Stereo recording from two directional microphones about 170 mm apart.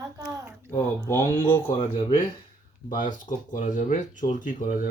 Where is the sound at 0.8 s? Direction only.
15° left (ahead or behind).